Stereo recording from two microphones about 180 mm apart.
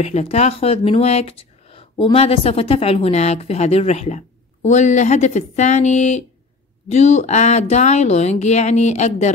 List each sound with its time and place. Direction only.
0.0 s speech: 35° left (ahead or behind)